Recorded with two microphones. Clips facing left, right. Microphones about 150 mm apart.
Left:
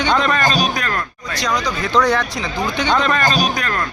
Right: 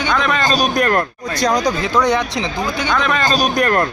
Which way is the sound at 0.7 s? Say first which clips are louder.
Right 7 dB; 50° right (ahead or behind).